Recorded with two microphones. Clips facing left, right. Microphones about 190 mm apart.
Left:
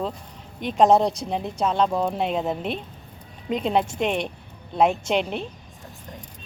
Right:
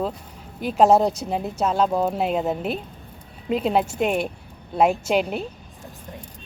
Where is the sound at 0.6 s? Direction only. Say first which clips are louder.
Right 1 dB; 5° right (ahead or behind).